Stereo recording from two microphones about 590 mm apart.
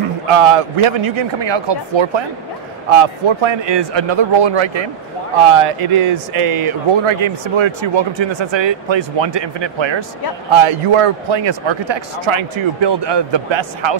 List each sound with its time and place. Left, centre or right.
0.3 s a man's voice: right
10.5 s a man's voice: right